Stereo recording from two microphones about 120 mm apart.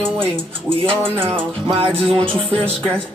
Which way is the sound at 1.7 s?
50° right (ahead or behind).